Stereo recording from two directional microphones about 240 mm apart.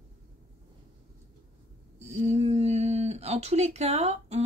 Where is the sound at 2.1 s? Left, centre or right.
Right.